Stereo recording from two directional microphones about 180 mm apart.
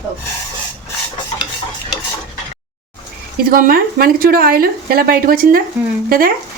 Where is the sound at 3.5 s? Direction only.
55° right (ahead or behind).